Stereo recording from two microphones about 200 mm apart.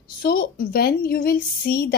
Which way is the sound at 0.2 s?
50° left (ahead or behind).